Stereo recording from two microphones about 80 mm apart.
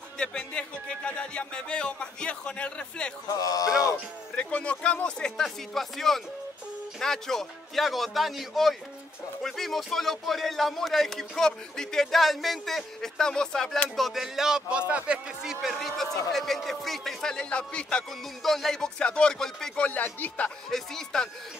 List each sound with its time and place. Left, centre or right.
0.2 s music: centre
3.3 s speech: left
4.4 s a man's voice: centre
19.9 s speech: left
20.7 s a man's voice: centre